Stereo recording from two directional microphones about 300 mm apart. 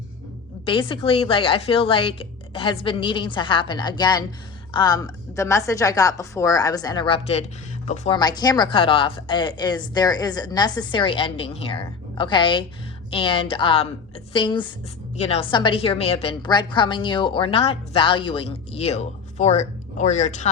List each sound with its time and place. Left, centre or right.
0.6 s a woman's voice: centre